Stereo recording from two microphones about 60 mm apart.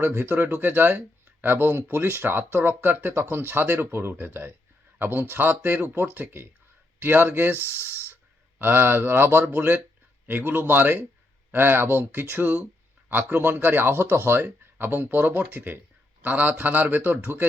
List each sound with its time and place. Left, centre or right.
0.0 s speech: right